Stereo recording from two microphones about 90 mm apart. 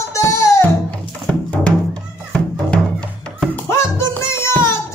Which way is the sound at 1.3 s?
15° left (ahead or behind).